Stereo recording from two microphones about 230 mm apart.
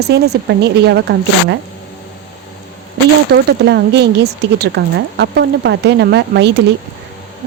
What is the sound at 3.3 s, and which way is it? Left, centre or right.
Speech, right.